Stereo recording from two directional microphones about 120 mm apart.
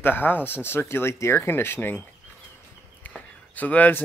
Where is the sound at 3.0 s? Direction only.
15° left (ahead or behind).